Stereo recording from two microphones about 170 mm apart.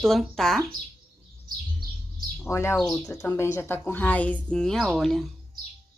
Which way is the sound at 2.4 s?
15° left (ahead or behind).